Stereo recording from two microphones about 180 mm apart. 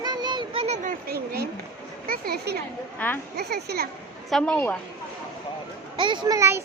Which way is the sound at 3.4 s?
65° right (ahead or behind).